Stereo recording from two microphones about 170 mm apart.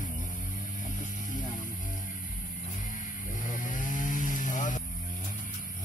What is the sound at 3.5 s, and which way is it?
Chainsaw, 50° left (ahead or behind).